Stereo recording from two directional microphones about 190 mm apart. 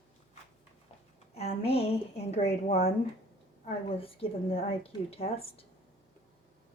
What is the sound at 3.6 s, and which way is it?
A woman's voice, 35° left (ahead or behind).